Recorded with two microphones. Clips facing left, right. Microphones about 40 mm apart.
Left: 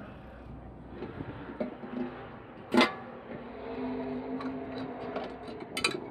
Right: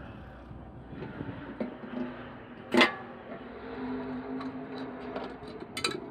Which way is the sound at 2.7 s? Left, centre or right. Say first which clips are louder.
Right 1 dB; right.